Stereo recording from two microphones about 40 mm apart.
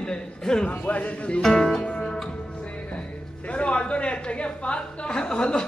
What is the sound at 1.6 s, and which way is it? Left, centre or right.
Music, centre.